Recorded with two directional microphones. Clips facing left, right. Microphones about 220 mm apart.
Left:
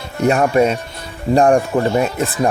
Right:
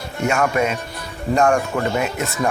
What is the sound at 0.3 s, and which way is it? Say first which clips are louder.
Speech: left 6 dB; 35° left (ahead or behind).